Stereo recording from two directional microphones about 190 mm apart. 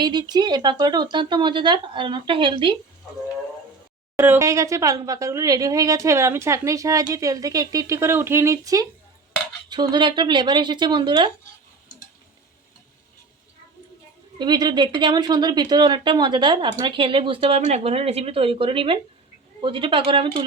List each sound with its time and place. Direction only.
0.0 s speech: 20° right (ahead or behind)
4.2 s speech: 15° right (ahead or behind)
14.3 s speech: 20° right (ahead or behind)